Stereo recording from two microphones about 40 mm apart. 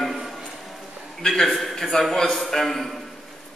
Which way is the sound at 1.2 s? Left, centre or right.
Centre.